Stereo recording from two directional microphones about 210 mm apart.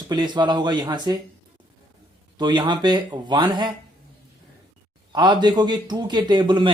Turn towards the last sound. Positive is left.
turn(degrees=-20)  # may be behind; listen again after turning